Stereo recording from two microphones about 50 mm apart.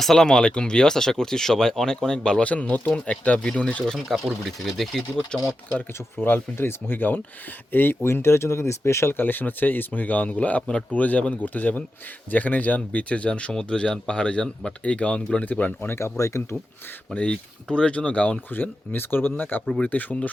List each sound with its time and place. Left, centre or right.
0.0 s speech: centre
2.5 s speech: left
3.8 s speech: centre
5.3 s speech: centre
6.2 s speech: left
8.0 s speech: left
9.1 s a man's voice: left
13.5 s speech: centre
15.4 s a man's voice: left
15.9 s speech: left
17.2 s speech: left
18.5 s a man's voice: left